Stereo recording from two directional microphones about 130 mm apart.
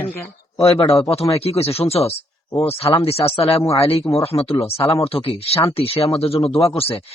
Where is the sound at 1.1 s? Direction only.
50° left (ahead or behind).